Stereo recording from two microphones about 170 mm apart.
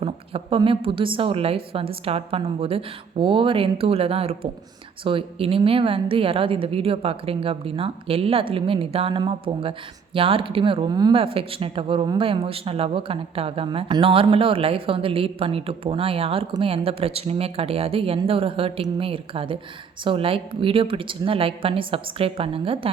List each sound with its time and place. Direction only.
0.0 s speech: 35° right (ahead or behind)